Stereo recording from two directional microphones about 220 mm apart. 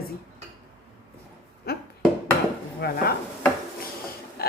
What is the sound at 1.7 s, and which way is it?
Speech, 45° left (ahead or behind).